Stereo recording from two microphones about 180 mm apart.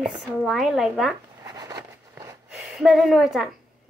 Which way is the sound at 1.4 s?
20° right (ahead or behind).